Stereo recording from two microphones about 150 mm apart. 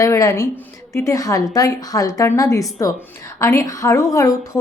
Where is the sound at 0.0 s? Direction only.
20° left (ahead or behind).